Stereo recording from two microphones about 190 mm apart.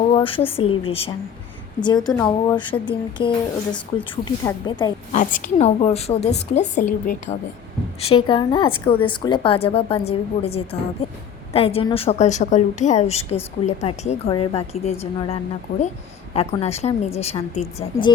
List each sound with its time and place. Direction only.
0.1 s speech: 30° left (ahead or behind)
2.2 s speech: 25° left (ahead or behind)
5.1 s a woman's voice: 40° left (ahead or behind)
8.1 s a woman's voice: 25° left (ahead or behind)